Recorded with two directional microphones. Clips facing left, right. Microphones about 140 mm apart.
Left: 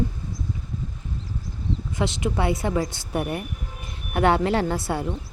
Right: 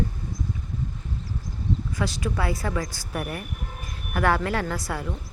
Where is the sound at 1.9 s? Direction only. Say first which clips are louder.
Left 6 dB; 25° left (ahead or behind).